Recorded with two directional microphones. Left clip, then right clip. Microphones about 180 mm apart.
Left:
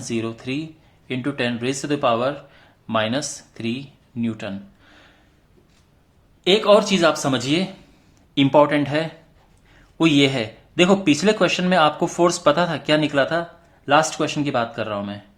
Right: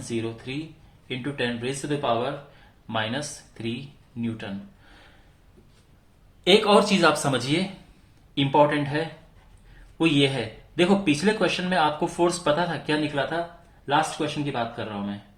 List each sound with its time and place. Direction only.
0.1 s speech: 45° left (ahead or behind)
6.4 s speech: 25° left (ahead or behind)
8.4 s speech: 45° left (ahead or behind)